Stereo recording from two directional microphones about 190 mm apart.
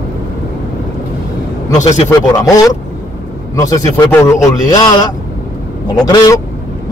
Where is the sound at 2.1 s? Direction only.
15° left (ahead or behind).